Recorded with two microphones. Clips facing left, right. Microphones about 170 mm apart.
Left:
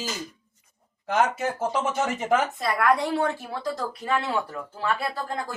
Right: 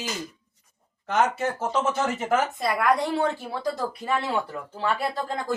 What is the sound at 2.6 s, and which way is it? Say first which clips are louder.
Speech: even; 15° right (ahead or behind).